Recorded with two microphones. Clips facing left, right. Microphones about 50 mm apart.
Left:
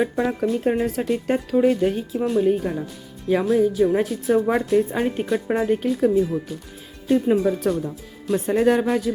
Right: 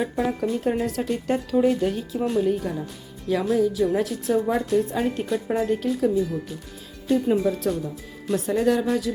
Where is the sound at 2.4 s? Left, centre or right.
Left.